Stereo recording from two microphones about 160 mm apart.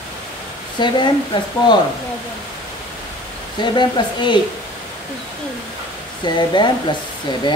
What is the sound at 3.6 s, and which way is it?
Speech, 30° left (ahead or behind).